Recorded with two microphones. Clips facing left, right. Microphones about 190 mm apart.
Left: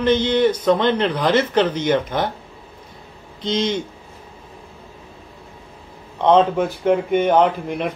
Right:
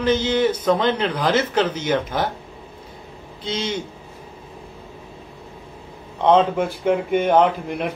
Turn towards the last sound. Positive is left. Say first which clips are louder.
# even
turn(degrees=-5)  # may be behind; listen again after turning